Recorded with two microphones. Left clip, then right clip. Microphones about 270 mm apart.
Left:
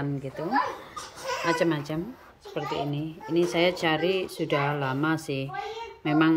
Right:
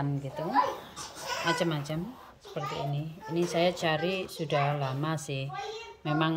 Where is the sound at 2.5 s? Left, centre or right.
Right.